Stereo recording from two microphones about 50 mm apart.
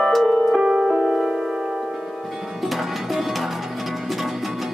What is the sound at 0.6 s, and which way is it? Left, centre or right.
Music, centre.